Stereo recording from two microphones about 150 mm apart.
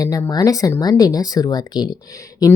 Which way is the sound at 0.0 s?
25° left (ahead or behind).